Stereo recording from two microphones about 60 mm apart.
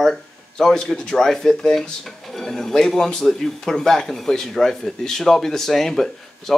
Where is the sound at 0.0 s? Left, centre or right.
Centre.